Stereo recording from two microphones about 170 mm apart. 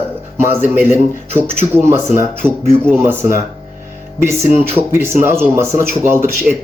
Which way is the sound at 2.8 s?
15° right (ahead or behind).